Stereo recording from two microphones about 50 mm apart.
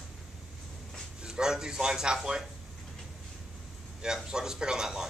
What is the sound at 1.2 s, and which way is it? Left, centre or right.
Speech, centre.